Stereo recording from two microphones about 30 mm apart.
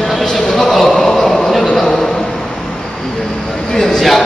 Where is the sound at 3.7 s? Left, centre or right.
Centre.